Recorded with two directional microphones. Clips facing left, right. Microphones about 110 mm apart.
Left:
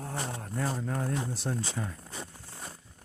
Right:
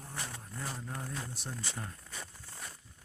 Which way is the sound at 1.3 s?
90° left.